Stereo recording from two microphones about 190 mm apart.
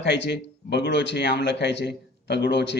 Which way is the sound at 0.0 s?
65° left (ahead or behind).